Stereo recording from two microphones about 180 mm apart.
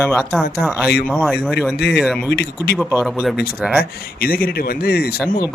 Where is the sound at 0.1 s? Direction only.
Centre (ahead or behind).